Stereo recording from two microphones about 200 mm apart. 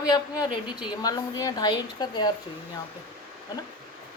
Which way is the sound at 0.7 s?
20° left (ahead or behind).